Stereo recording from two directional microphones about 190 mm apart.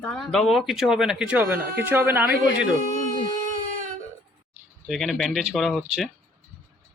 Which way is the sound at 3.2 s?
45° right (ahead or behind).